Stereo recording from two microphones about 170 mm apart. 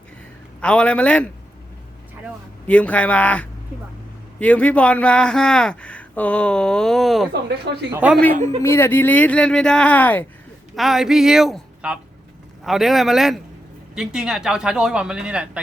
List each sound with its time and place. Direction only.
0.6 s a man's voice: 5° left (ahead or behind)
2.6 s a man's voice: 10° left (ahead or behind)
7.4 s speech: 75° right (ahead or behind)
8.1 s a man's voice: 10° left (ahead or behind)
10.8 s speech: centre (ahead or behind)